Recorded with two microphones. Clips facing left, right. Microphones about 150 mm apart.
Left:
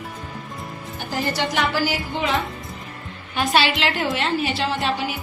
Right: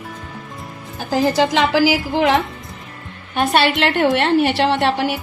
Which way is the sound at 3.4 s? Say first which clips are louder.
Right 4 dB; 55° right (ahead or behind).